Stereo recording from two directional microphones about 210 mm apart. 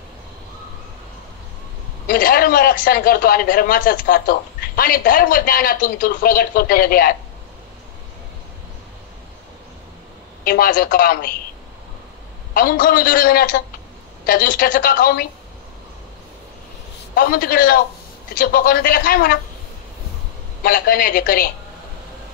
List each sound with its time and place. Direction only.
2.0 s a man's voice: 45° left (ahead or behind)
10.4 s a man's voice: 45° left (ahead or behind)
12.5 s a man's voice: 45° left (ahead or behind)
17.1 s a man's voice: 45° left (ahead or behind)
20.6 s a man's voice: 45° left (ahead or behind)